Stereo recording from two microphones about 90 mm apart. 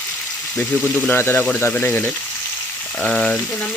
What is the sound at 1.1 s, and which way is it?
Speech, 20° left (ahead or behind).